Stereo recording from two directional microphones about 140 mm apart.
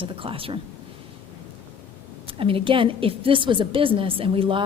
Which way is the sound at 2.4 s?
40° right (ahead or behind).